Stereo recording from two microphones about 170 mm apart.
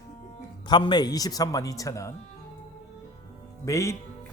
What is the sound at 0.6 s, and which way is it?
Speech, 25° left (ahead or behind).